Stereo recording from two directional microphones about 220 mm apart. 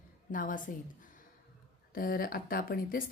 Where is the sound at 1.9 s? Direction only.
40° left (ahead or behind).